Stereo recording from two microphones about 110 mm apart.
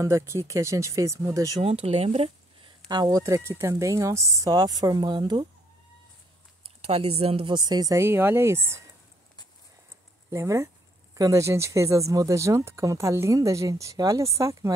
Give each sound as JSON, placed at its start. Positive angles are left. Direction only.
{"t": 0.0, "sound": "speech", "side_deg": -25}
{"t": 1.6, "sound": "speech", "side_deg": -70}
{"t": 2.9, "sound": "speech", "side_deg": -35}
{"t": 6.6, "sound": "speech", "side_deg": -65}
{"t": 7.4, "sound": "speech", "side_deg": -40}
{"t": 8.0, "sound": "speech", "side_deg": -20}
{"t": 10.3, "sound": "speech", "side_deg": -30}